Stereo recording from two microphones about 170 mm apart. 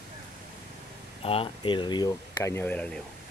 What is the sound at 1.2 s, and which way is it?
Speech, 35° left (ahead or behind).